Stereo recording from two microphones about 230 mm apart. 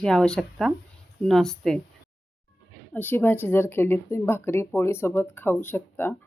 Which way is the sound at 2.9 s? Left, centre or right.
Centre.